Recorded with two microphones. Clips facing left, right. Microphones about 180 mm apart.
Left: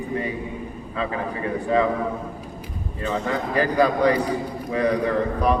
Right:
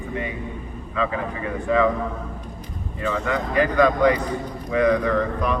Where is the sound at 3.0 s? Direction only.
35° left (ahead or behind).